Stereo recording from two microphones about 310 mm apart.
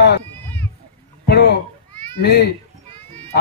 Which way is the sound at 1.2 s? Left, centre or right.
Left.